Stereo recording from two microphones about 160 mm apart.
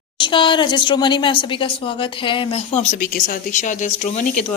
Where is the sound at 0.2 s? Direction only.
30° left (ahead or behind).